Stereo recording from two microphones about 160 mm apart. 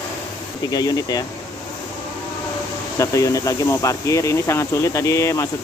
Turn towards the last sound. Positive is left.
turn(degrees=20)  # may be behind; listen again after turning